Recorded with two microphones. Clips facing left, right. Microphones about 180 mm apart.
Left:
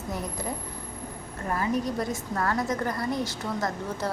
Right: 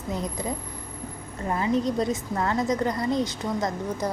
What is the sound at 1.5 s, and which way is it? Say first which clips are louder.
A woman's voice: right 3 dB; 20° right (ahead or behind).